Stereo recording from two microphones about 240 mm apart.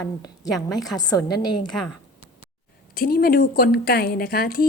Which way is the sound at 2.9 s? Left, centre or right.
Left.